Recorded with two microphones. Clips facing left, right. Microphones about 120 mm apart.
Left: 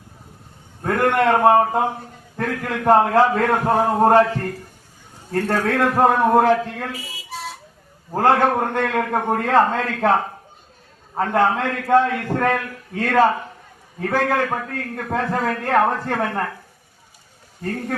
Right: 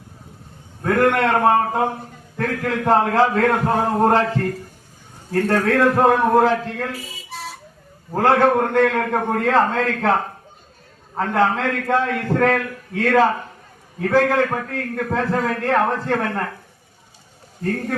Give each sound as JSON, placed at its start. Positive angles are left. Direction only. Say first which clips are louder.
{"t": 0.9, "sound": "a man's voice", "louder": "even", "side_deg": 5}